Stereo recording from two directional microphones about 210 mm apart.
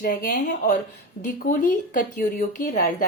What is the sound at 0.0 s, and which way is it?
A woman's voice, 40° left (ahead or behind).